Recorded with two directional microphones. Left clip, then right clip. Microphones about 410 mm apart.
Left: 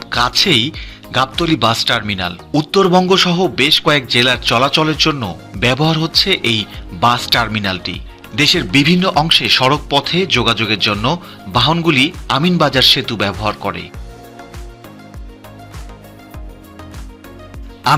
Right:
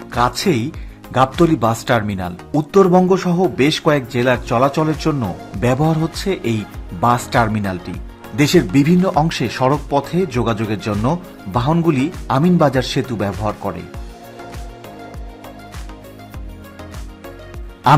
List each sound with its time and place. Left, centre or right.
0.1 s music: centre
1.1 s speech: centre